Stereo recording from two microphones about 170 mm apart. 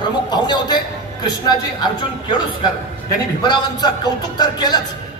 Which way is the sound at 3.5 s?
25° left (ahead or behind).